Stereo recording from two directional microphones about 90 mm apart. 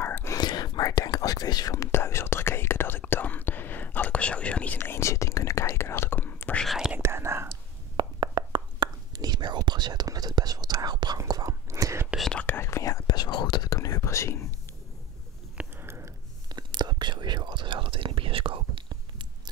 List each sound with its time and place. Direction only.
0.0 s whispering: 30° left (ahead or behind)
0.4 s whispering: 50° left (ahead or behind); by 4.7 s 15° left (ahead or behind)
4.7 s whispering: 25° left (ahead or behind)
6.6 s whispering: centre (ahead or behind)
7.0 s whispering: 30° right (ahead or behind)
7.9 s whispering: 55° right (ahead or behind); by 12.1 s 35° right (ahead or behind)
12.2 s whispering: 5° left (ahead or behind)
12.4 s whispering: 25° left (ahead or behind)
13.0 s whispering: 50° left (ahead or behind); by 14.4 s 30° left (ahead or behind)
15.5 s biting: 25° right (ahead or behind)
16.5 s whispering: 55° right (ahead or behind); by 18.9 s 85° right
18.9 s chewing: 55° right (ahead or behind)